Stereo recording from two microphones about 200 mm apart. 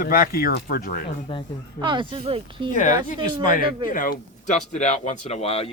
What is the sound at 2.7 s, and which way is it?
Speech, 40° left (ahead or behind).